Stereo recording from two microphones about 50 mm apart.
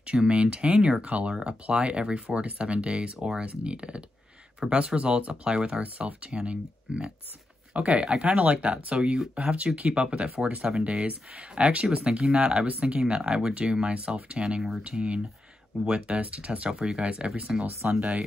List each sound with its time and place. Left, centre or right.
0.0 s speech: right
8.9 s speech: centre
14.8 s speech: right
17.8 s speech: right